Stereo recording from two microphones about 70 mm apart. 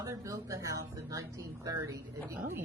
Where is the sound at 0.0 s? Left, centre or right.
Right.